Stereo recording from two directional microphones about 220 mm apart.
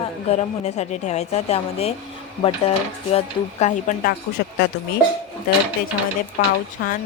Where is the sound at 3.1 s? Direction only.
30° left (ahead or behind).